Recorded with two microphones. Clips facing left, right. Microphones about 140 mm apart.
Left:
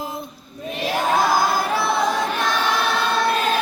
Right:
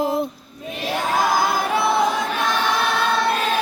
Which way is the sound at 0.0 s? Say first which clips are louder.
Right 9 dB; 75° right (ahead or behind).